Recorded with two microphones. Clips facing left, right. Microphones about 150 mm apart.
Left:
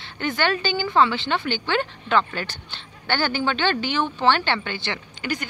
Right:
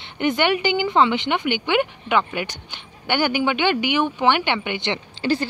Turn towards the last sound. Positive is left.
turn(degrees=-30)  # may be behind; listen again after turning